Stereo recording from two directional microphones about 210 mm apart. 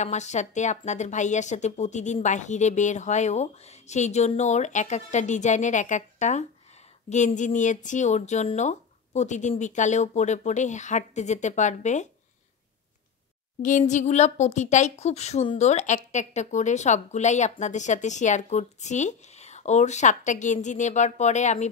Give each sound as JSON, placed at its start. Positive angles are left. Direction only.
{"t": 0.0, "sound": "a woman's voice", "side_deg": 35}
{"t": 13.6, "sound": "a woman's voice", "side_deg": 35}